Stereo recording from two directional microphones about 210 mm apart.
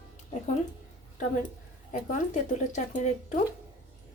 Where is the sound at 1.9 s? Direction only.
35° left (ahead or behind).